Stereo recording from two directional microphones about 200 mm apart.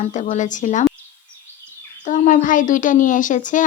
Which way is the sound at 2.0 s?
40° left (ahead or behind).